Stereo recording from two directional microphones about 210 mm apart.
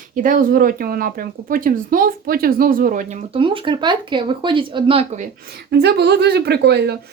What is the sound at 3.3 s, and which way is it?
A woman's voice, 25° right (ahead or behind).